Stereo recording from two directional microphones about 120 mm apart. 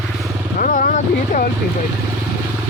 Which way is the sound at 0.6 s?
90° left.